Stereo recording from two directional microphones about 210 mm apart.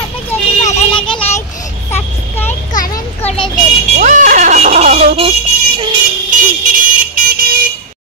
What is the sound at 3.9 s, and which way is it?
Speech, 35° right (ahead or behind).